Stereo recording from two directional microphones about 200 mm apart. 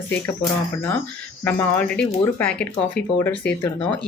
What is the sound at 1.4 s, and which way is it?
Speech, 10° left (ahead or behind).